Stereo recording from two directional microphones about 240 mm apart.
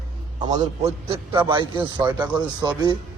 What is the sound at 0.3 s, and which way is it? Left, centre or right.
A man's voice, centre.